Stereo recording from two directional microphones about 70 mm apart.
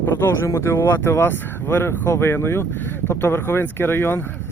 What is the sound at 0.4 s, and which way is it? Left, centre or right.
Speech, left.